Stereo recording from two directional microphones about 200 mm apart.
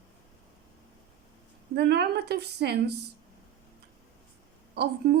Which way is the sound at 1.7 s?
55° right (ahead or behind).